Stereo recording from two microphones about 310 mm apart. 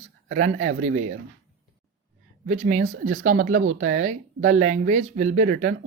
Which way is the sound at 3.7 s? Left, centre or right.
Right.